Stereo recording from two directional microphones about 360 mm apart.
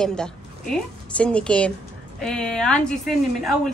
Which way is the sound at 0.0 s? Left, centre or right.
Centre.